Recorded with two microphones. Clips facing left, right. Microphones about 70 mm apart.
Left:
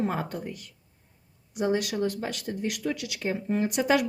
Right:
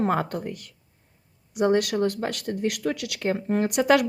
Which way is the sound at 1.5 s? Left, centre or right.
Right.